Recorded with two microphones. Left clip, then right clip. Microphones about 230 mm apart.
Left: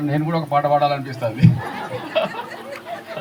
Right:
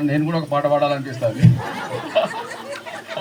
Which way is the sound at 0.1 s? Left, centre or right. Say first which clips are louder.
Left 1 dB; left.